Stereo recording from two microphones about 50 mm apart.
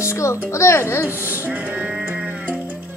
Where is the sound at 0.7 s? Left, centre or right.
Left.